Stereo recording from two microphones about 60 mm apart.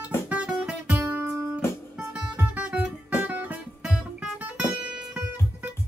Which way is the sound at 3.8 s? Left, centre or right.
Centre.